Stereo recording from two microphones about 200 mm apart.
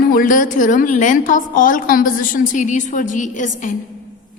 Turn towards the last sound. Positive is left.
turn(degrees=40)  # may be behind; listen again after turning